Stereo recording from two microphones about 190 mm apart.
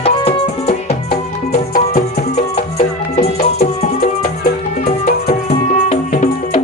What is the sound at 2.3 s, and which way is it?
Music, 35° left (ahead or behind).